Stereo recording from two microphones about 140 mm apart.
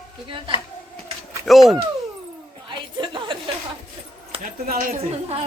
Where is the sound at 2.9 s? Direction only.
35° right (ahead or behind).